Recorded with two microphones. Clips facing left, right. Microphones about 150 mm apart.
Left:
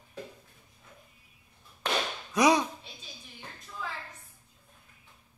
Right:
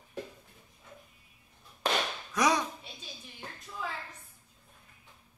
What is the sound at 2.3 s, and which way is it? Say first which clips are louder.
Speech: left 4 dB; 20° left (ahead or behind).